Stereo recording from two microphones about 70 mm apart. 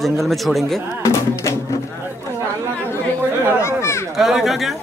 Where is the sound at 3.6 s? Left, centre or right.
Left.